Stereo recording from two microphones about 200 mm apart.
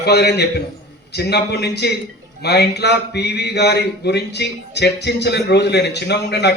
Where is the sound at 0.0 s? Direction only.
55° left (ahead or behind).